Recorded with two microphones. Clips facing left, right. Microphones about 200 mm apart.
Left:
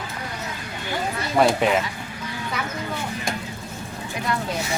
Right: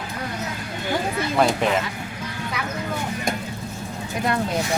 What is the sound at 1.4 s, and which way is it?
Speech, 5° left (ahead or behind).